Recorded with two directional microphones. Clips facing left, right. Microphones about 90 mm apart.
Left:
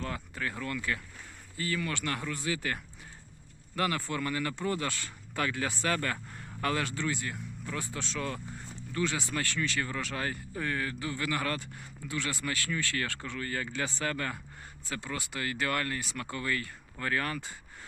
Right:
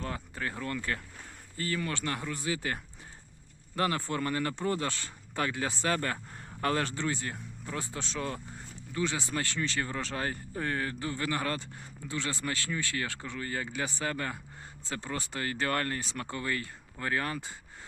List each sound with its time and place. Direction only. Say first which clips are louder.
0.0 s speech: even; 30° right (ahead or behind)
14.8 s speech: right 1 dB; 30° right (ahead or behind)